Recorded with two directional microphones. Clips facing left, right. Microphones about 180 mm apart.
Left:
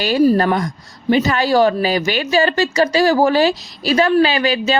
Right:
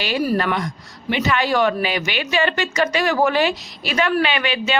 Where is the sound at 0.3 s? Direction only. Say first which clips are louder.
Left 5 dB; 40° left (ahead or behind).